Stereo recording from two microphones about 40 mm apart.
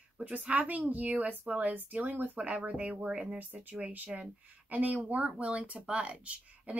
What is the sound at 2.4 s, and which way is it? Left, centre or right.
Speech, right.